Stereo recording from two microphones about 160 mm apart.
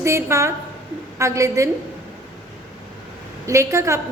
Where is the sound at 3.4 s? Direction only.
20° right (ahead or behind).